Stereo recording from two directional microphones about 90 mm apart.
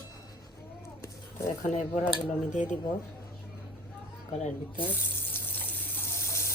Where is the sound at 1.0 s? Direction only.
30° left (ahead or behind).